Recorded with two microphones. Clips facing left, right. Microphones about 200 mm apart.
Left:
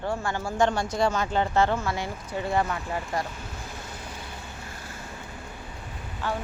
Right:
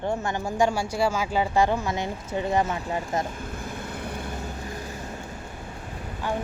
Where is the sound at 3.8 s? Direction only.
60° right (ahead or behind).